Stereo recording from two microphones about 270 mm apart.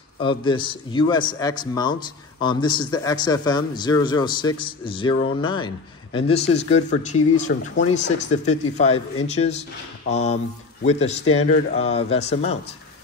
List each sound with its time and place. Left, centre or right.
0.2 s a man's voice: centre